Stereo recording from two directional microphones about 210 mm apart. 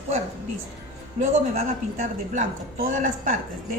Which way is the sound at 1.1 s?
35° right (ahead or behind).